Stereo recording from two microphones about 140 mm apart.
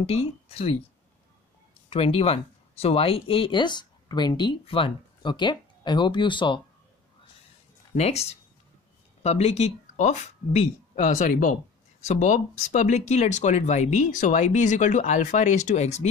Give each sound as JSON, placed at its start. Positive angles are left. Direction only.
{"t": 0.0, "sound": "speech", "side_deg": 45}
{"t": 1.9, "sound": "speech", "side_deg": 45}
{"t": 7.9, "sound": "speech", "side_deg": 50}
{"t": 12.0, "sound": "speech", "side_deg": 60}